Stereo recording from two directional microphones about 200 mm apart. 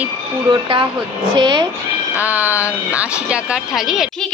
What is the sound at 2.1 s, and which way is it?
A woman's voice, 10° right (ahead or behind).